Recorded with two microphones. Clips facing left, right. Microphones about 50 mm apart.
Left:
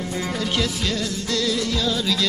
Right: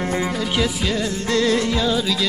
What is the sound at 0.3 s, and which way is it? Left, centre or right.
Music, centre.